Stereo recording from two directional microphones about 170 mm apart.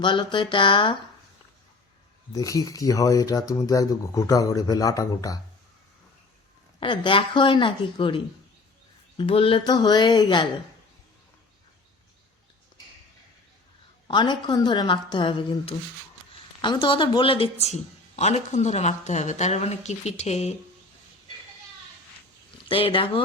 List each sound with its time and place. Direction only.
0.0 s speech: 30° left (ahead or behind)
2.3 s speech: 20° left (ahead or behind)
6.7 s speech: 30° left (ahead or behind)
14.1 s speech: 25° left (ahead or behind)
22.7 s speech: 30° left (ahead or behind)